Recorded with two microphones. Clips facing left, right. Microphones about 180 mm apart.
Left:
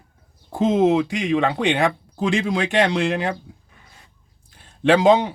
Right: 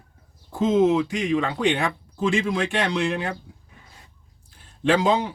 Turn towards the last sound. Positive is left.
turn(degrees=65)  # may be behind; listen again after turning